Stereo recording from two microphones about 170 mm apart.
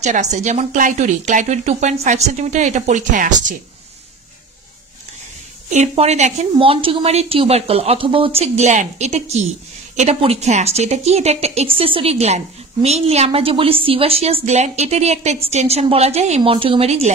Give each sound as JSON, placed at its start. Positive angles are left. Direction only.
{"t": 0.0, "sound": "speech", "side_deg": -40}
{"t": 5.7, "sound": "speech", "side_deg": -40}